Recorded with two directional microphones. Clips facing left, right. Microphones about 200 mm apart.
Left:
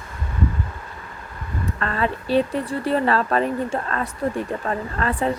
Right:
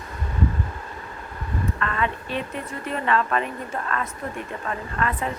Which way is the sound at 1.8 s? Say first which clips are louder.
Left 5 dB; 35° left (ahead or behind).